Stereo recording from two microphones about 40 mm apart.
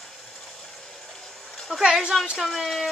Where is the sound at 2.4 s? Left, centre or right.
Centre.